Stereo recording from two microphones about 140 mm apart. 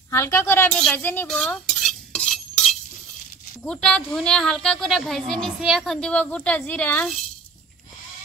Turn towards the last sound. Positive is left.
turn(degrees=10)  # may be behind; listen again after turning